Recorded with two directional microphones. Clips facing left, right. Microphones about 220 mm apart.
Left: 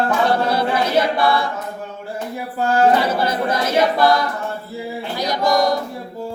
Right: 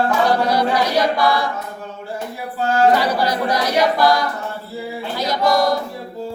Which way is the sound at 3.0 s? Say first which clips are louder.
Even; 25° left (ahead or behind).